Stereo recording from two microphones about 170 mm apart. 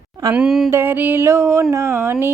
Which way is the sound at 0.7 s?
10° right (ahead or behind).